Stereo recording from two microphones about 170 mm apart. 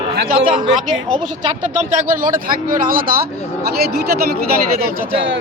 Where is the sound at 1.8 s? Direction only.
50° right (ahead or behind); by 4.4 s 65° right (ahead or behind).